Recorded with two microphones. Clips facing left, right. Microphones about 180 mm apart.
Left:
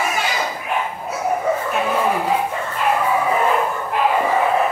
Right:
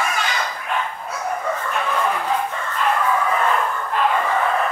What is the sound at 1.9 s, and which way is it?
Dog, 10° left (ahead or behind).